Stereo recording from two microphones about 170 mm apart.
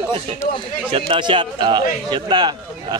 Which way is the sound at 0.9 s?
30° right (ahead or behind).